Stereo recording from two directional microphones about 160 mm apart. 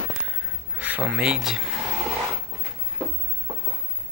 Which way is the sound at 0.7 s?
10° right (ahead or behind).